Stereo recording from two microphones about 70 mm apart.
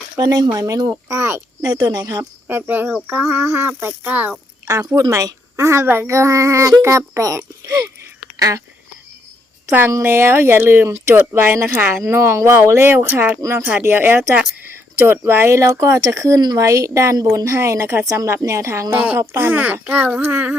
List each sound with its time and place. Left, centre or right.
0.2 s speech: right
0.5 s speech: right
1.6 s speech: right
2.5 s speech: right
3.4 s speech: right
3.7 s speech: right
4.6 s a woman's voice: right
10.0 s speech: right
18.0 s speech: right
18.4 s speech: right
18.9 s speech: right
19.3 s speech: right
19.9 s speech: right